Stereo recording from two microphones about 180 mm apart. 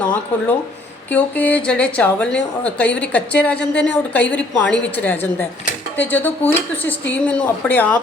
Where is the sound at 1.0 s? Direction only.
10° left (ahead or behind).